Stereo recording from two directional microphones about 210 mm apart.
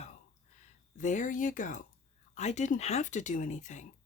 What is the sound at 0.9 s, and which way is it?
Speech, 35° left (ahead or behind).